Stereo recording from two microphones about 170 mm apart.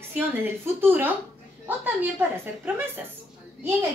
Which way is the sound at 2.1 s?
10° right (ahead or behind).